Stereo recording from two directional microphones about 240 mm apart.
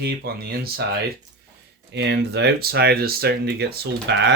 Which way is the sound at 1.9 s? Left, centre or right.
Right.